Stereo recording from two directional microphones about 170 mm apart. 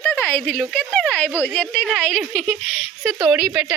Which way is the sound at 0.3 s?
10° left (ahead or behind).